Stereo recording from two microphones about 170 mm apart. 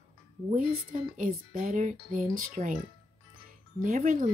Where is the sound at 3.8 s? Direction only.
45° right (ahead or behind).